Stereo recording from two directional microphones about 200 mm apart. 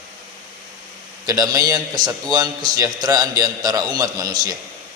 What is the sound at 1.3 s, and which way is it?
A man's voice, 20° right (ahead or behind).